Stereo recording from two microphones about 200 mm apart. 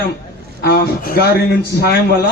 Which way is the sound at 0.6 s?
50° left (ahead or behind).